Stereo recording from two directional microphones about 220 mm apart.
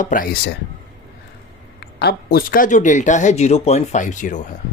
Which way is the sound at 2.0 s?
45° left (ahead or behind).